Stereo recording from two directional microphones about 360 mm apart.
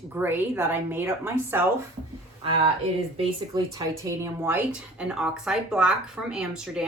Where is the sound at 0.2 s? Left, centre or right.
Centre.